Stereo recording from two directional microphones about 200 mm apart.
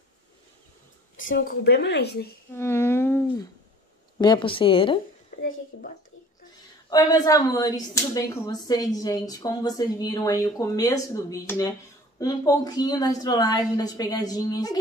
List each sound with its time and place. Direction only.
1.4 s speech: 55° left (ahead or behind)
2.5 s humming: 10° left (ahead or behind)
4.2 s speech: 25° left (ahead or behind)
6.9 s speech: 20° left (ahead or behind)